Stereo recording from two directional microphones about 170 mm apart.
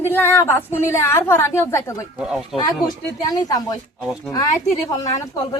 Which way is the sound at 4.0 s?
5° right (ahead or behind).